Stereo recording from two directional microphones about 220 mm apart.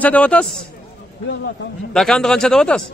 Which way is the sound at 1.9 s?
Centre (ahead or behind).